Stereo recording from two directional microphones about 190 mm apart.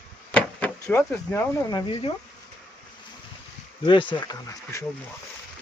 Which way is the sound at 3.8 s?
25° left (ahead or behind).